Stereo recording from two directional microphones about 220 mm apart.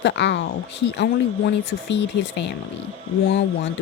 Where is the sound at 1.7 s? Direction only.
50° left (ahead or behind).